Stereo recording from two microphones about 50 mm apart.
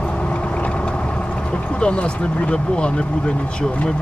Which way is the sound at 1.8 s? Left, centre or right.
Left.